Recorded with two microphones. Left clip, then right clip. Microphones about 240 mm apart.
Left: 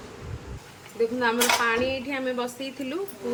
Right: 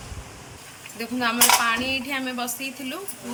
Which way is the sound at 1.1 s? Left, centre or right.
Centre.